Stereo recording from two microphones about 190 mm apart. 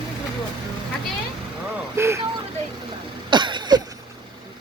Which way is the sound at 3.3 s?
25° right (ahead or behind).